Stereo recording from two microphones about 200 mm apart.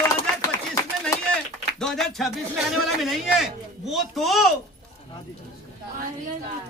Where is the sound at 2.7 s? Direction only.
Centre (ahead or behind).